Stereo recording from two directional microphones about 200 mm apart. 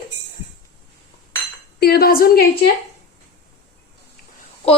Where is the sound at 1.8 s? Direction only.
50° left (ahead or behind).